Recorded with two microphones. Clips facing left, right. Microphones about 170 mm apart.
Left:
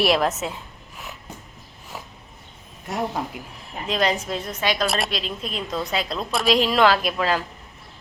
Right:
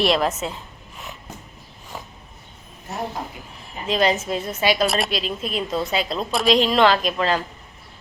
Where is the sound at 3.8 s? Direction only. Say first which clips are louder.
Right 3 dB; centre (ahead or behind).